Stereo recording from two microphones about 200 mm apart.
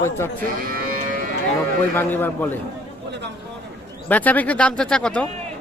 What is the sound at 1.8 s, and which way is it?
Speech, 10° left (ahead or behind).